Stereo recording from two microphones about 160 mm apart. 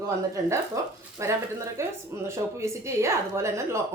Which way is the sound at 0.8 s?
20° right (ahead or behind).